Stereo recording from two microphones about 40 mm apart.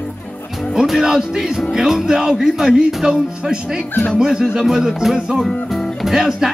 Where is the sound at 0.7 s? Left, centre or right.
Centre.